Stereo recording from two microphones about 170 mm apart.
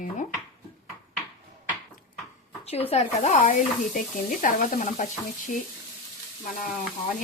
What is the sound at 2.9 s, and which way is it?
Speech, 40° left (ahead or behind).